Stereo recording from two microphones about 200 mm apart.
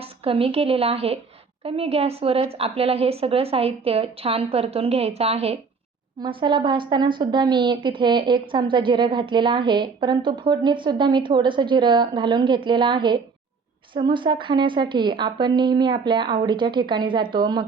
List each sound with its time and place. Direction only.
0.0 s a woman's voice: 30° right (ahead or behind)